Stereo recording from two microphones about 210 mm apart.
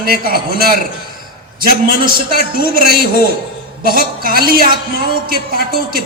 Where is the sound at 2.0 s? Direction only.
45° right (ahead or behind).